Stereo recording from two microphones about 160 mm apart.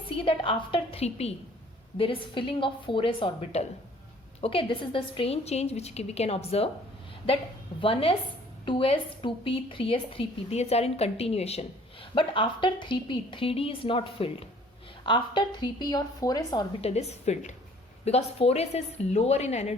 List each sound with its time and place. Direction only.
0.2 s a woman's voice: 35° left (ahead or behind)
7.8 s a woman's voice: 35° left (ahead or behind)
16.8 s a woman's voice: 40° left (ahead or behind)